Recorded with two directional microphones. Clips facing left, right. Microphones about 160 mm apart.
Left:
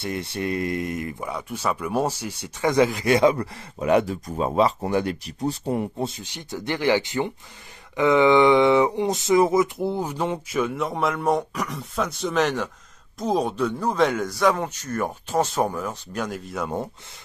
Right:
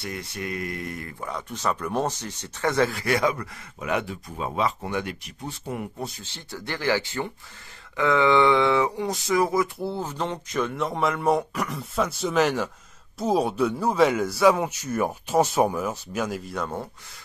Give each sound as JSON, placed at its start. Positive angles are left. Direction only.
{"t": 0.0, "sound": "speech", "side_deg": 25}
{"t": 16.6, "sound": "speech", "side_deg": 20}